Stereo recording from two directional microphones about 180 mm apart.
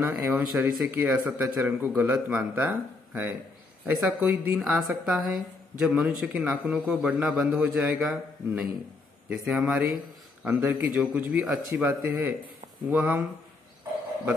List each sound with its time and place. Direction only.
0.0 s speech: 10° right (ahead or behind)
4.6 s a man's voice: centre (ahead or behind)